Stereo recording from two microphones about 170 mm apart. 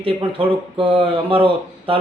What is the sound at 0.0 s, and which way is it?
Speech, 30° right (ahead or behind).